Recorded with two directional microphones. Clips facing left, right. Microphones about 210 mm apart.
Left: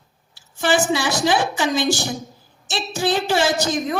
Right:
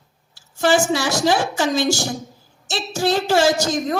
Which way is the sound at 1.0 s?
40° right (ahead or behind).